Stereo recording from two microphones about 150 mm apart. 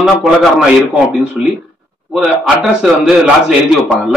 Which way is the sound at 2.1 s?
5° right (ahead or behind).